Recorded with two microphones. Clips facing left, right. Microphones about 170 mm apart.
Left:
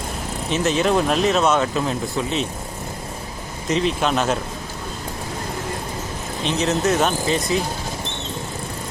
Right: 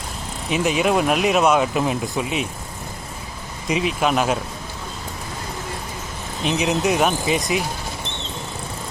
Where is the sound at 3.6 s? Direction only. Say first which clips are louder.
Even; 10° right (ahead or behind).